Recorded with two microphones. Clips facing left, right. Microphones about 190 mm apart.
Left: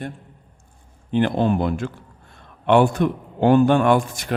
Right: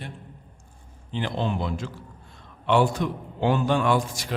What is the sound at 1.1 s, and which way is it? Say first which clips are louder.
A man's voice: left 9 dB; 55° left (ahead or behind).